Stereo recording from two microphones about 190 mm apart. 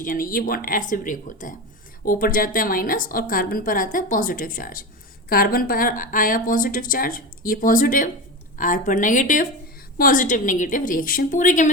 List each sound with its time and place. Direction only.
0.0 s a woman's voice: 45° left (ahead or behind)